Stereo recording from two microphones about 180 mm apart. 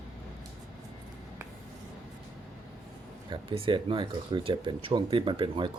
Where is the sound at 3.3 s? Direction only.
30° right (ahead or behind).